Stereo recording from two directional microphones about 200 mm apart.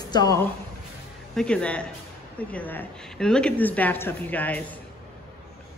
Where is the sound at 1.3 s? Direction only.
5° left (ahead or behind).